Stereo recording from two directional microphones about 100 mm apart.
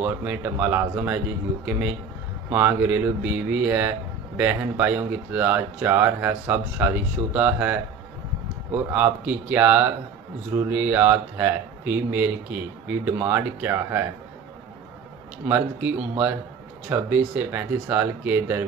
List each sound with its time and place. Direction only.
0.0 s speech: 15° right (ahead or behind)
2.5 s speech: 20° right (ahead or behind)
15.4 s speech: 15° right (ahead or behind)